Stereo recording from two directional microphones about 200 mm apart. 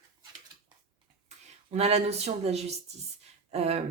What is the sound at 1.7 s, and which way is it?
Speech, 35° right (ahead or behind).